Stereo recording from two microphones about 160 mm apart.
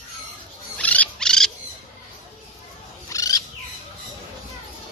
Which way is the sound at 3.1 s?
20° left (ahead or behind).